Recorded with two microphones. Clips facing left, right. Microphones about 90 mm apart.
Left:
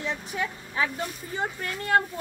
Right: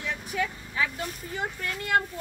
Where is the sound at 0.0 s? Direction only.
25° left (ahead or behind).